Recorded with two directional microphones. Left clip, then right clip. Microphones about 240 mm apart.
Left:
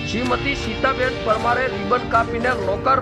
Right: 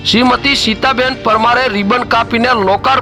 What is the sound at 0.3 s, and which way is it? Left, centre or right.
Speech, right.